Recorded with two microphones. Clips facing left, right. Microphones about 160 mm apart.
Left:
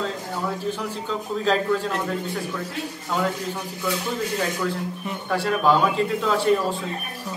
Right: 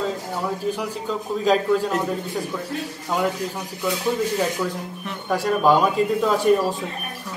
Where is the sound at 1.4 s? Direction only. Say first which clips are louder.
Right 3 dB; 10° right (ahead or behind).